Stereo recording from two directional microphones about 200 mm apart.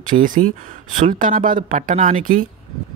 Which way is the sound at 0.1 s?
40° right (ahead or behind).